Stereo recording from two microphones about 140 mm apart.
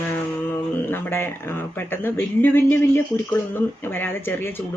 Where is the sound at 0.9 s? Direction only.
15° left (ahead or behind).